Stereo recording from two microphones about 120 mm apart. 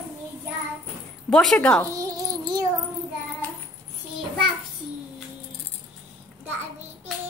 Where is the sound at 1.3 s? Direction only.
5° left (ahead or behind).